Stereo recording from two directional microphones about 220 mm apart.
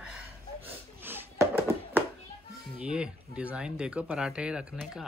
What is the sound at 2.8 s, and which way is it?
Speech, 5° right (ahead or behind).